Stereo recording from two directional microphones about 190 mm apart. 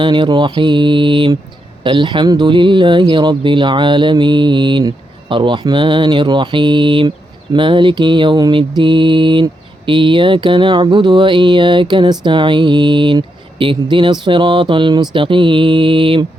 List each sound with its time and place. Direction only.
0.0 s mantra: 25° right (ahead or behind)